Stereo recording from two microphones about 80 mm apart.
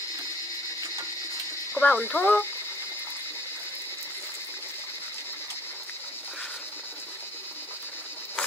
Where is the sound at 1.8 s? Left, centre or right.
Left.